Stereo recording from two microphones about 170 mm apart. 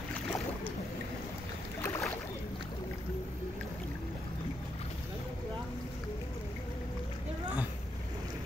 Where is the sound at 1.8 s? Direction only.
20° left (ahead or behind).